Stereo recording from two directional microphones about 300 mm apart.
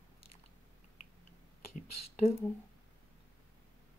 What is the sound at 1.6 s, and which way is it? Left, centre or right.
Speech, left.